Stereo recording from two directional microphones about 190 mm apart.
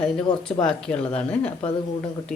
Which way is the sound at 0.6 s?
5° left (ahead or behind).